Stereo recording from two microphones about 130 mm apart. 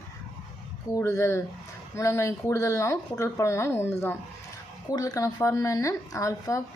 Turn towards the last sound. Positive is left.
turn(degrees=25)  # may be behind; listen again after turning